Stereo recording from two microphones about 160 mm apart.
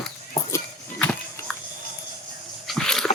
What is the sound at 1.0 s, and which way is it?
Music, 10° left (ahead or behind).